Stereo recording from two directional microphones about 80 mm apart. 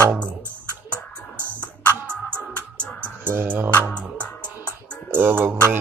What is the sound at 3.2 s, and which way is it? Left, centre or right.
Speech, right.